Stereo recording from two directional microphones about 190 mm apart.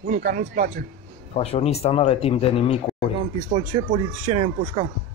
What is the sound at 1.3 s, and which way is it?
Speech, 30° left (ahead or behind).